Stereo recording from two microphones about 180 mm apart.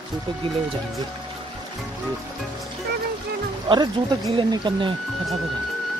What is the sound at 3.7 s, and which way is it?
Speech, 25° right (ahead or behind).